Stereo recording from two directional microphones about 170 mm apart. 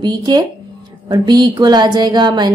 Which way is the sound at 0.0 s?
25° right (ahead or behind).